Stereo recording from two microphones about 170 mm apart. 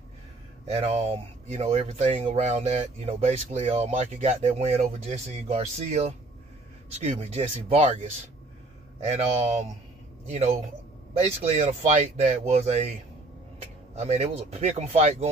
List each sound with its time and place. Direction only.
0.7 s speech: 40° right (ahead or behind)